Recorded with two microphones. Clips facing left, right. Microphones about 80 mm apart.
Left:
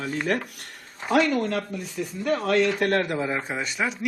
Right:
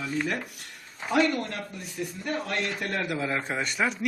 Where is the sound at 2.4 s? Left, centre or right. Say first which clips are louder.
Left 10 dB; left.